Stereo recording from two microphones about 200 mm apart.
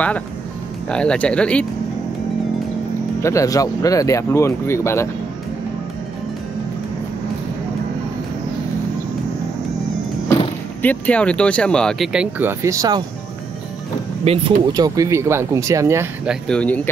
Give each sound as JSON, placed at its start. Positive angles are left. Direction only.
{"t": 0.8, "sound": "speech", "side_deg": 5}
{"t": 3.2, "sound": "speech", "side_deg": 15}
{"t": 10.8, "sound": "speech", "side_deg": 5}
{"t": 14.2, "sound": "speech", "side_deg": -30}
{"t": 16.4, "sound": "speech", "side_deg": 5}